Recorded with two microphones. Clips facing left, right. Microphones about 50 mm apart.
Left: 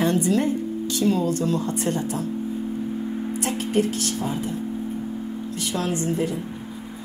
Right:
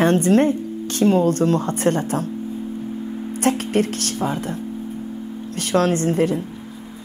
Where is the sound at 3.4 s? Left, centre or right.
Right.